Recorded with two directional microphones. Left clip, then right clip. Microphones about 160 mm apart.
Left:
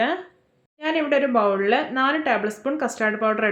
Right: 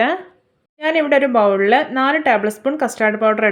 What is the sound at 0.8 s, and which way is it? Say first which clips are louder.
Speech: right 6 dB; 35° right (ahead or behind).